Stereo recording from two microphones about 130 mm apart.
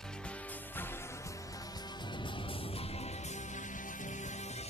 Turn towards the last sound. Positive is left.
turn(degrees=60)  # may be behind; listen again after turning